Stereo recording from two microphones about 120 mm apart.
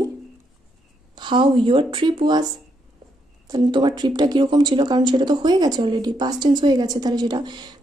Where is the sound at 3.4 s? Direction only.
35° right (ahead or behind).